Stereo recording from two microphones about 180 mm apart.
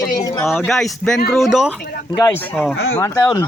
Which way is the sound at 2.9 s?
15° left (ahead or behind).